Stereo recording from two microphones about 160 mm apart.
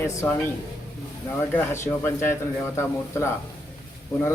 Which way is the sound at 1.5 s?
15° left (ahead or behind).